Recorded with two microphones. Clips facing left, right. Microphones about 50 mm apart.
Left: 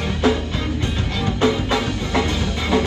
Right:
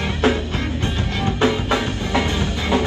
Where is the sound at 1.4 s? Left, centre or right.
Right.